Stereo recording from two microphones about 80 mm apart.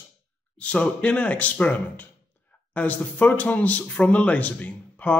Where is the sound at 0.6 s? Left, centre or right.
Centre.